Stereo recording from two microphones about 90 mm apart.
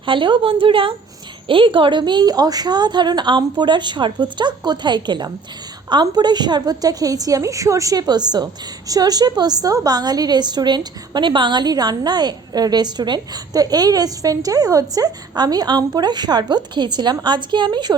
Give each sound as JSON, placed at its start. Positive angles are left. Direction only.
{"t": 0.0, "sound": "a woman's voice", "side_deg": -65}